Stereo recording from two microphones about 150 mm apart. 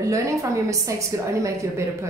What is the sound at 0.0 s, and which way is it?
A woman's voice, 20° right (ahead or behind).